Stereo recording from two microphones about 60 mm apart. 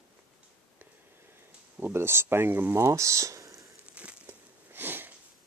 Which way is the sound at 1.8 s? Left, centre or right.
Right.